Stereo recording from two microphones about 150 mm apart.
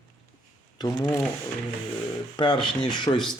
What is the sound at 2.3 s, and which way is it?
Speech, 30° left (ahead or behind).